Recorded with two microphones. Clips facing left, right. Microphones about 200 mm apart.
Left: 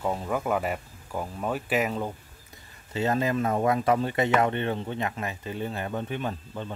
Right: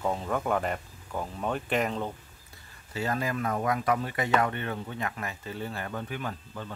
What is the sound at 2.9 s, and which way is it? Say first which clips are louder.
Speech: left 5 dB; 25° left (ahead or behind).